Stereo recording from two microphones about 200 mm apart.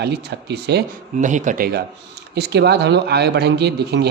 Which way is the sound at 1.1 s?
40° right (ahead or behind).